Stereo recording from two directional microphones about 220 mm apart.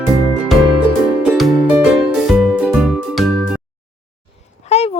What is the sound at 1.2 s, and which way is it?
Music, centre (ahead or behind).